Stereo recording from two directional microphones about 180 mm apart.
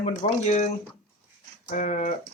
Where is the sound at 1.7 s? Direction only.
45° left (ahead or behind).